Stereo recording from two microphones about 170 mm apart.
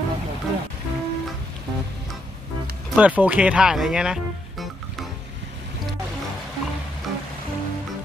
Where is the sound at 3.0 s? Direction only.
10° right (ahead or behind).